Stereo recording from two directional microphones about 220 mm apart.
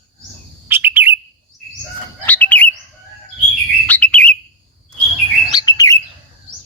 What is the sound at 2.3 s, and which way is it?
Bird, 5° left (ahead or behind).